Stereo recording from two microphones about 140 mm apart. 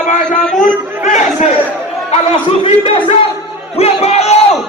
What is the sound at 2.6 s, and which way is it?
Speech, 40° left (ahead or behind).